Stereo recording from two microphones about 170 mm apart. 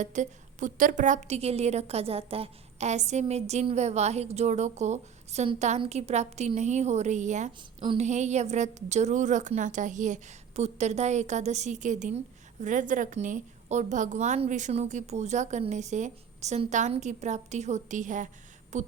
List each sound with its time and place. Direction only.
0.0 s a woman's voice: 45° right (ahead or behind)
7.8 s speech: 30° right (ahead or behind)
8.0 s a woman's voice: 45° right (ahead or behind)